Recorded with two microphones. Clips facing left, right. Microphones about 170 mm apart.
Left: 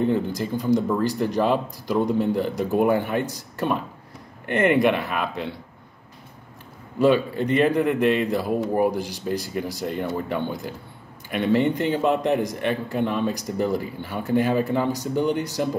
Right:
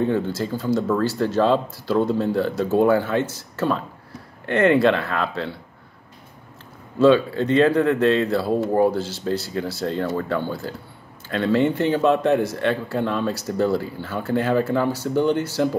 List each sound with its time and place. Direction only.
0.0 s speech: 15° left (ahead or behind)
7.0 s speech: 15° left (ahead or behind)